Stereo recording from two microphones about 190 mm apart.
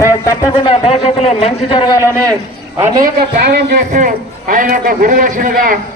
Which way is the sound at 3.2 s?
55° right (ahead or behind).